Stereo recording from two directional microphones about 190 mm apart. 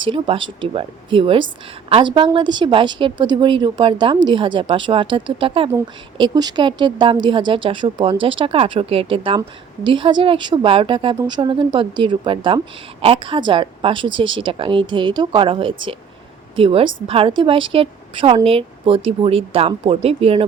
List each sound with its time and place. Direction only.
0.0 s a woman's voice: 25° right (ahead or behind)